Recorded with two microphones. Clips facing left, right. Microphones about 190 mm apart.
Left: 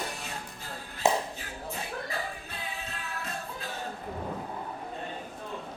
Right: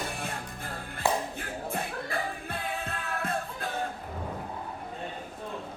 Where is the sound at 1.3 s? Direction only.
55° right (ahead or behind).